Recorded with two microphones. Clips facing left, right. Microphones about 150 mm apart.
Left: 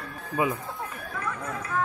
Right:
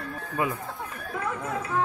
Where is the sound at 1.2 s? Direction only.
30° right (ahead or behind).